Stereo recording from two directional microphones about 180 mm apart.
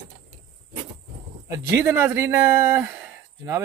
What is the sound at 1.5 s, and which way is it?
Speech, 15° right (ahead or behind).